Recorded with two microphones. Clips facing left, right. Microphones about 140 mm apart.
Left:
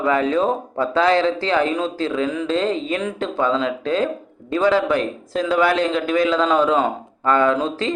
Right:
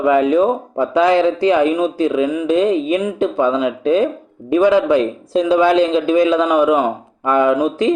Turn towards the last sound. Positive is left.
turn(degrees=-15)  # may be behind; listen again after turning